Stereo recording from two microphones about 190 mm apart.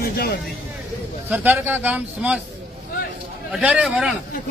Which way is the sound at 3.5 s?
5° right (ahead or behind).